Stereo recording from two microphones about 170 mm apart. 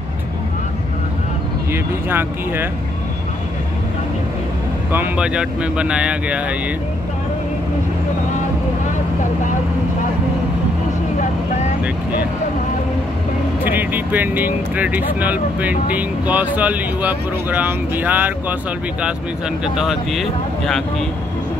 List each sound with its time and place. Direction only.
1.7 s speech: 10° right (ahead or behind)
4.9 s speech: 10° right (ahead or behind)
11.1 s vehicle: 45° left (ahead or behind)
13.7 s speech: 10° right (ahead or behind)
19.6 s speech: 5° right (ahead or behind)